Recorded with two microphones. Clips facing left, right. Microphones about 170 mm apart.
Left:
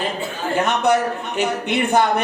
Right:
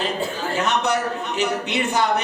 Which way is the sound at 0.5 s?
55° left (ahead or behind).